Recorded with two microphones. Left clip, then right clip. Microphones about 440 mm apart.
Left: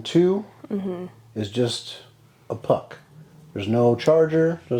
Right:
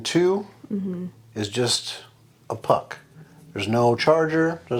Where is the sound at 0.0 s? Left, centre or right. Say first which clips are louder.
Left 1 dB; right.